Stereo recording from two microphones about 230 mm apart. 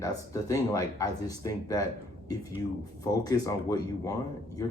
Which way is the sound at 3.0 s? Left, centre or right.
Centre.